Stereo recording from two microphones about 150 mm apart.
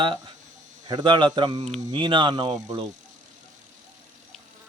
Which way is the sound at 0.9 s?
30° right (ahead or behind).